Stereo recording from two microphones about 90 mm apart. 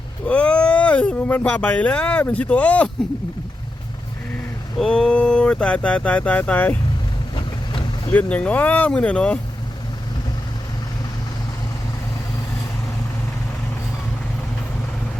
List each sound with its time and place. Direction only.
0.3 s speech: 15° left (ahead or behind)
4.8 s speech: 10° left (ahead or behind)
7.3 s vehicle: 65° left (ahead or behind)
8.1 s speech: 15° left (ahead or behind)